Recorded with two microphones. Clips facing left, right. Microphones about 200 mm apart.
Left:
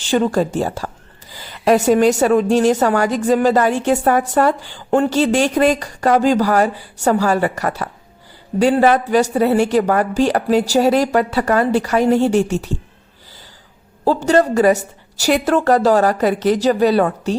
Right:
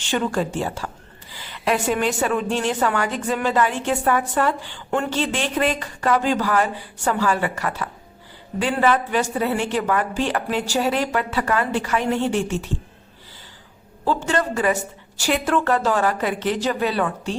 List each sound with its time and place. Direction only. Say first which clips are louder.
0.0 s a woman's voice: left 6 dB; 35° left (ahead or behind)
14.0 s a woman's voice: left 8 dB; 40° left (ahead or behind)